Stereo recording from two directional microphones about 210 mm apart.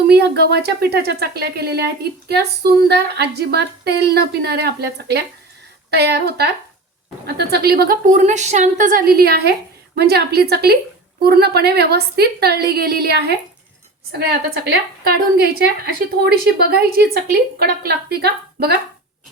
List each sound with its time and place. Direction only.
0.1 s speech: 50° right (ahead or behind)